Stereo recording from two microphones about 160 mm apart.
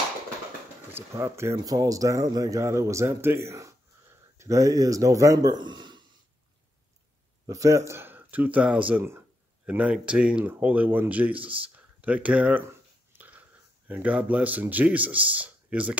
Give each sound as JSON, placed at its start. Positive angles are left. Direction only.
{"t": 0.9, "sound": "a man's voice", "side_deg": -15}
{"t": 7.4, "sound": "speech", "side_deg": -20}
{"t": 13.1, "sound": "a sound", "side_deg": -10}
{"t": 13.8, "sound": "speech", "side_deg": -10}